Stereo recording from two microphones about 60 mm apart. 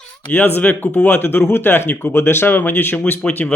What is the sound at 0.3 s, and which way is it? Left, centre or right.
Speech, left.